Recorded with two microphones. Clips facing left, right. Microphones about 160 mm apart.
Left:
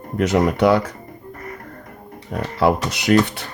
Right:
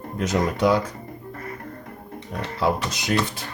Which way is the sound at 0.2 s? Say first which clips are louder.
Left 5 dB; 65° left (ahead or behind).